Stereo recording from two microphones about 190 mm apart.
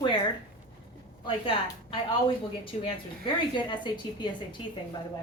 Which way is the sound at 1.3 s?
25° left (ahead or behind).